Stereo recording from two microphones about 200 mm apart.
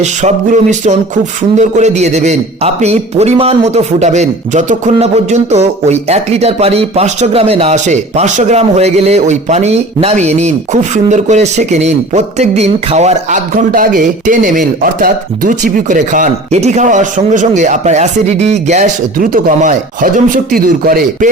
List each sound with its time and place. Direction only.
0.0 s a man's voice: 35° right (ahead or behind)